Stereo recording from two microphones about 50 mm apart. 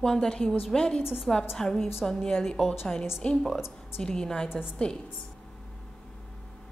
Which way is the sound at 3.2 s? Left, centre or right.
Left.